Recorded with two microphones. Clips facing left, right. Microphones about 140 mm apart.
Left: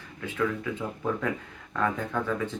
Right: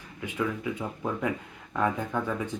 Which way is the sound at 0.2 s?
15° right (ahead or behind).